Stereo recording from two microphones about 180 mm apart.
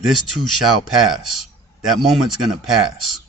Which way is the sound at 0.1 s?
Centre (ahead or behind).